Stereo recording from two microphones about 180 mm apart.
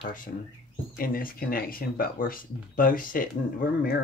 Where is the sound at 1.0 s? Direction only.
55° left (ahead or behind).